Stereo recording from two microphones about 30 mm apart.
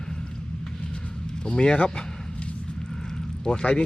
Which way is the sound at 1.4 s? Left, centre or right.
Left.